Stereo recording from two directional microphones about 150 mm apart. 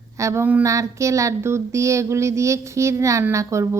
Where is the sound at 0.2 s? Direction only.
20° right (ahead or behind).